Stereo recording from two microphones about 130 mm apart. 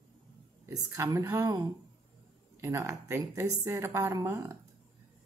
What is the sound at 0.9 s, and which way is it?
A woman's voice, 20° right (ahead or behind).